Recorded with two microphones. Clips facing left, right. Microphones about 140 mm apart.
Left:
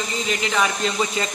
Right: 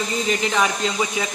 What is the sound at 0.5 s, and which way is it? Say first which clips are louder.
Speech: right 1 dB; 10° right (ahead or behind).